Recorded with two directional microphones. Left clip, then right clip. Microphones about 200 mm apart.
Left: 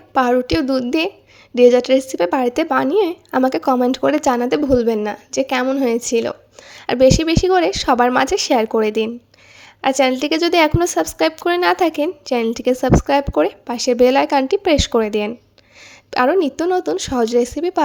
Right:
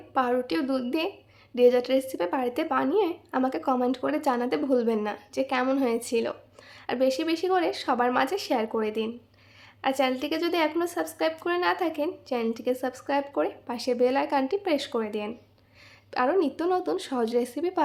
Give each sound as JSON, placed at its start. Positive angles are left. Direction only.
{"t": 0.1, "sound": "a woman's voice", "side_deg": 35}